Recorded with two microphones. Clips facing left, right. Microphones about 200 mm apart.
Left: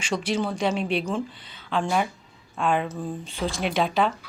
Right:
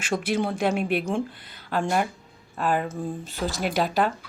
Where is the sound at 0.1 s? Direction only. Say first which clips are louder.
Right 1 dB; 55° right (ahead or behind).